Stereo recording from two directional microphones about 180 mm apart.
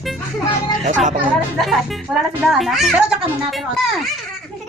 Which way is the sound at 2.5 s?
Centre (ahead or behind).